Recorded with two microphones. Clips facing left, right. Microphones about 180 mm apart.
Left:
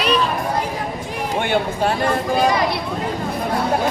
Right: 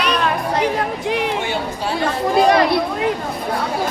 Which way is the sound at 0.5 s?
75° right (ahead or behind).